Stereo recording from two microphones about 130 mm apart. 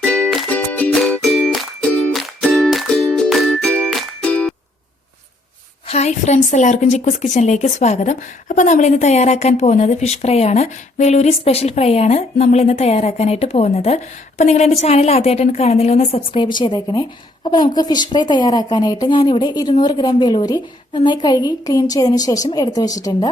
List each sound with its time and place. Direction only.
0.0 s music: 10° left (ahead or behind)
3.6 s music: 10° left (ahead or behind)
5.9 s speech: 60° left (ahead or behind)
16.6 s a woman's voice: 30° left (ahead or behind)